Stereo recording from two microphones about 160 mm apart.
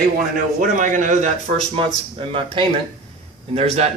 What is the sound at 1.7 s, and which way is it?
A man's voice, 35° right (ahead or behind).